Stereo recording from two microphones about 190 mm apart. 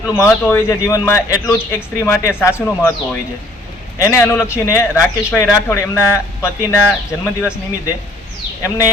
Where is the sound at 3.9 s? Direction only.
15° left (ahead or behind).